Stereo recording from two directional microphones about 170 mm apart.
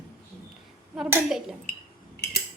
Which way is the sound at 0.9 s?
5° right (ahead or behind).